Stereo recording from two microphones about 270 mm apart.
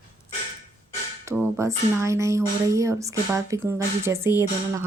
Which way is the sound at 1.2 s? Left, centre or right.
Centre.